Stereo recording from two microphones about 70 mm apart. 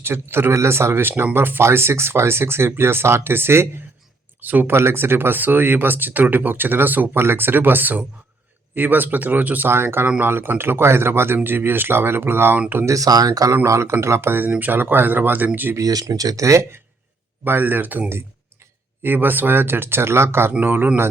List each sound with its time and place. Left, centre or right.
0.0 s speech: right
4.4 s speech: right
12.5 s speech: right
12.8 s speech: right
13.7 s speech: right
15.8 s speech: right
17.4 s speech: right
19.0 s speech: right
20.5 s speech: right